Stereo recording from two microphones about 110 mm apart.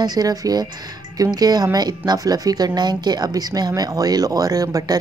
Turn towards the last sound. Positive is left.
turn(degrees=-35)  # may be behind; listen again after turning